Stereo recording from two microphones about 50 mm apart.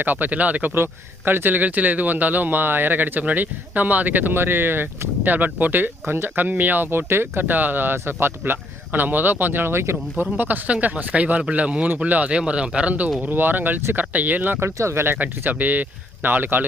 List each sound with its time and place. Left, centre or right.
0.0 s speech: right
0.7 s speech: right
6.9 s speech: right
10.3 s speech: right
10.7 s speech: right
12.3 s speech: right
13.2 s speech: right
14.6 s speech: right
15.2 s speech: right